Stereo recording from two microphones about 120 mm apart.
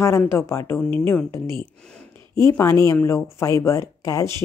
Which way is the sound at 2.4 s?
25° left (ahead or behind).